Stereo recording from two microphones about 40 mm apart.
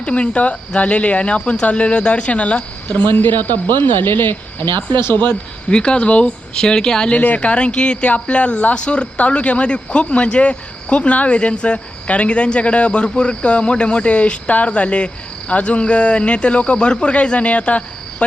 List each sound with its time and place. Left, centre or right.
0.0 s speech: left
3.1 s speech: left
5.6 s speech: left
6.6 s speech: centre
7.1 s speech: left